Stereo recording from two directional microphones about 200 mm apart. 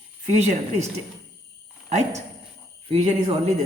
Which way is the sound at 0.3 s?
35° right (ahead or behind).